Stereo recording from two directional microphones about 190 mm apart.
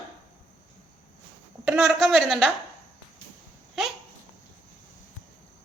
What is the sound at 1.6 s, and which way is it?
Speech, centre (ahead or behind).